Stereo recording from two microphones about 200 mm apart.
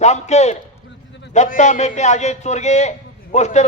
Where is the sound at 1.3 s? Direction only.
35° left (ahead or behind).